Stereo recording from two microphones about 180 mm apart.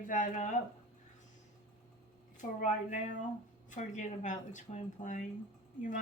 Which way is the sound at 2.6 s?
45° left (ahead or behind).